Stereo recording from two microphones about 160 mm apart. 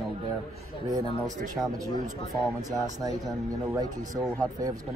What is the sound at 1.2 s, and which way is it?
Speech, 20° right (ahead or behind).